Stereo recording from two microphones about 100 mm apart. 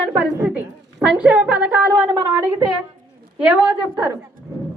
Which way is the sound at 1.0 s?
10° right (ahead or behind).